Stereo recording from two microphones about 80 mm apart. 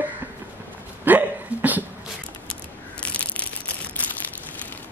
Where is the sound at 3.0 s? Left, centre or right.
Centre.